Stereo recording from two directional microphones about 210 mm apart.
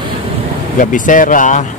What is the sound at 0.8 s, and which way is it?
Speech, 40° left (ahead or behind).